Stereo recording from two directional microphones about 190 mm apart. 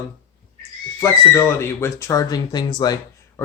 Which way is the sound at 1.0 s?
10° left (ahead or behind).